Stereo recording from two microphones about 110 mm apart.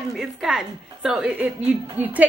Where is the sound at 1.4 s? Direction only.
15° right (ahead or behind).